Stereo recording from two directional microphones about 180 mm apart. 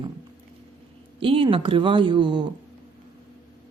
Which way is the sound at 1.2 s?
30° right (ahead or behind).